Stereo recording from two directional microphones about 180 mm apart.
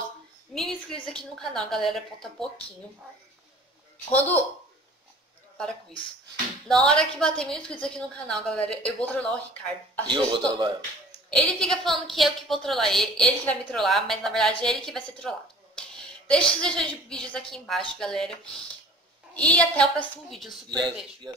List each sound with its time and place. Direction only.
0.6 s a woman's voice: centre (ahead or behind)
4.1 s speech: 10° left (ahead or behind)
6.7 s a woman's voice: 5° left (ahead or behind)
10.0 s a man's voice: 25° right (ahead or behind)
11.2 s a woman's voice: 5° left (ahead or behind)
15.9 s a sound: 5° left (ahead or behind)
16.6 s a woman's voice: 5° left (ahead or behind)